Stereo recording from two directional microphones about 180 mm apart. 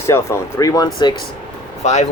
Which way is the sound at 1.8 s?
40° left (ahead or behind).